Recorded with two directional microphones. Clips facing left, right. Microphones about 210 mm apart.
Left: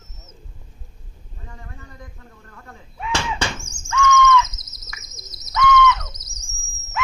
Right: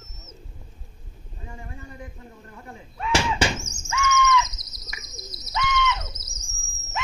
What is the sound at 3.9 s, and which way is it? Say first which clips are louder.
Squawk: left 6 dB; 10° right (ahead or behind).